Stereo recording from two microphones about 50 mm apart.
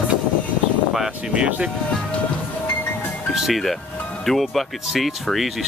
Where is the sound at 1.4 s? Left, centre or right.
Right.